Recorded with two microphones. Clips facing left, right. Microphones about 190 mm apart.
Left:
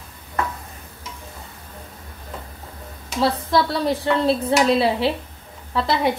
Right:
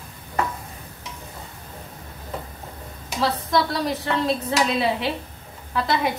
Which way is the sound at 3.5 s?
30° left (ahead or behind).